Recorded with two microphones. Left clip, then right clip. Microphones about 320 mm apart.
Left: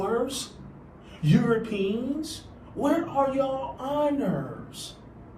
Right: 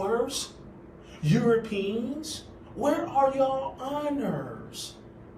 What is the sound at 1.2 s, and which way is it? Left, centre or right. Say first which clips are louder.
Speech: even; centre.